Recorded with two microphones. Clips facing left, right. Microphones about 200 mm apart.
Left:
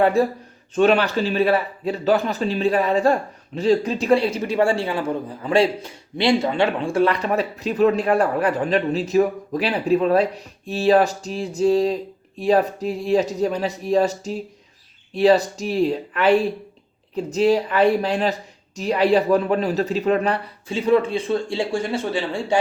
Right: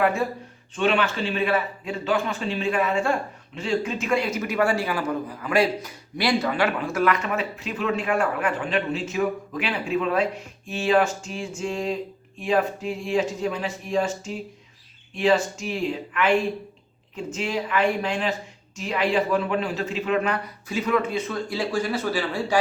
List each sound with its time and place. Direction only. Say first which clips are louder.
0.0 s speech: left 5 dB; 35° left (ahead or behind)